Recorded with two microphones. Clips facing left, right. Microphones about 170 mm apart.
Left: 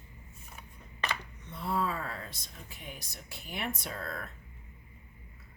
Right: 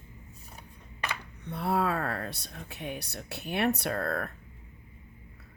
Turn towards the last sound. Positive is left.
turn(degrees=-60)  # may be behind; listen again after turning